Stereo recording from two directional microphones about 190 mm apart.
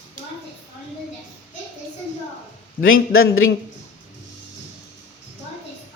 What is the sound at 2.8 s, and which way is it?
Speech, 90° left.